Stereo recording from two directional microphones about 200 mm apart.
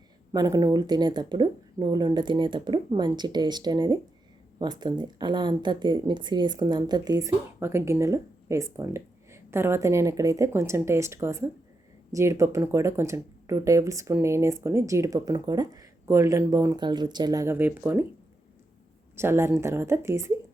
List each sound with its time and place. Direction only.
0.3 s speech: 15° right (ahead or behind)
19.1 s speech: 10° right (ahead or behind)